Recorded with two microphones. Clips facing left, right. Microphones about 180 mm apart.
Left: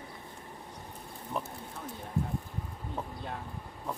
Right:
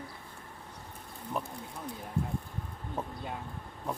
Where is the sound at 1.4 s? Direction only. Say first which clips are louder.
Even; centre (ahead or behind).